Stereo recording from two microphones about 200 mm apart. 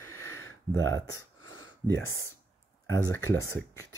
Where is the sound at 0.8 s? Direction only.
70° right (ahead or behind).